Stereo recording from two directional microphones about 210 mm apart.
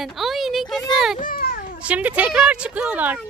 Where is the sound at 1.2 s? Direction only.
45° left (ahead or behind).